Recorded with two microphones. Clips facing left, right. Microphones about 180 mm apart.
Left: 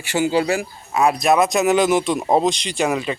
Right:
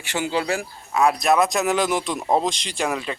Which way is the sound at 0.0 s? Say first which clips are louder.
Left 6 dB; 5° left (ahead or behind).